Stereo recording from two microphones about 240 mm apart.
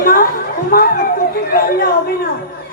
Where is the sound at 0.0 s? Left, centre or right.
Left.